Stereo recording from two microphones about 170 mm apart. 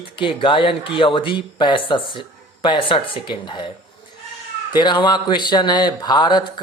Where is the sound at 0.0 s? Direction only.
30° left (ahead or behind).